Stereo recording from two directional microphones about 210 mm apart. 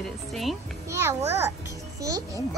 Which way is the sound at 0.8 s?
15° right (ahead or behind).